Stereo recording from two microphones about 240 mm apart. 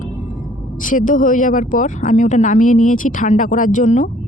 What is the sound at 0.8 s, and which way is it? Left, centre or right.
Speech, left.